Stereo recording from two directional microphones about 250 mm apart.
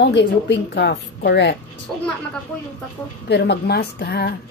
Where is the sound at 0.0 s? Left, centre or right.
Left.